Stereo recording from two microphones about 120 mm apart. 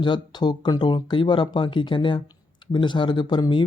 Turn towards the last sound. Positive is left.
turn(degrees=40)  # may be behind; listen again after turning